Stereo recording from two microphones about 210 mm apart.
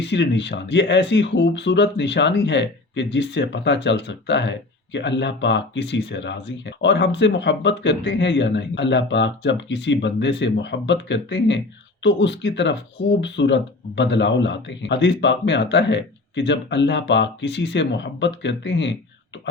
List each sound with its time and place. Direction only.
0.0 s speech: 55° left (ahead or behind)